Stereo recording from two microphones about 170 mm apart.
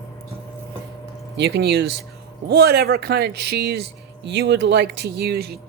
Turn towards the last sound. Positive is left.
turn(degrees=-65)  # may be behind; listen again after turning